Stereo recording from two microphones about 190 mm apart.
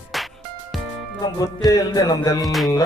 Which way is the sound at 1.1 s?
20° left (ahead or behind).